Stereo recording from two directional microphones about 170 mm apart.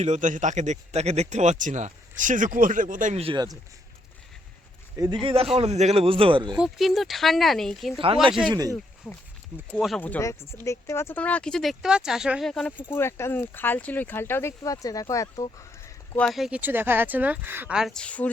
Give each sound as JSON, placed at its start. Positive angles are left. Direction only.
{"t": 0.0, "sound": "speech", "side_deg": -45}
{"t": 5.2, "sound": "speech", "side_deg": -35}
{"t": 6.6, "sound": "speech", "side_deg": 0}
{"t": 8.0, "sound": "speech", "side_deg": -30}
{"t": 9.7, "sound": "speech", "side_deg": 5}
{"t": 16.1, "sound": "speech", "side_deg": 0}